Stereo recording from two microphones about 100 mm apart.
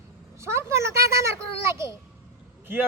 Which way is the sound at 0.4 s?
30° right (ahead or behind).